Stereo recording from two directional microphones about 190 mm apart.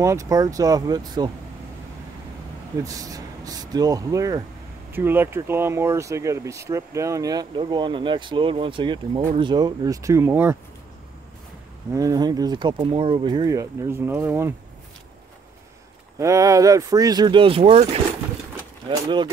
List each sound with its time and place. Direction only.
0.0 s speech: 15° right (ahead or behind)
2.8 s speech: 20° right (ahead or behind)
11.9 s speech: 20° right (ahead or behind)
16.2 s speech: 15° right (ahead or behind)
18.9 s speech: 25° right (ahead or behind)